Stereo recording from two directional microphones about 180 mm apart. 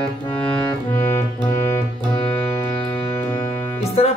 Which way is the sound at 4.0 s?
35° left (ahead or behind).